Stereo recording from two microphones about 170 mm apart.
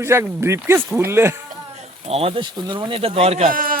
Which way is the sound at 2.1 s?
35° right (ahead or behind).